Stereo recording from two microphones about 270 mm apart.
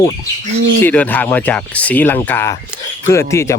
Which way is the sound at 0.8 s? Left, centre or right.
Centre.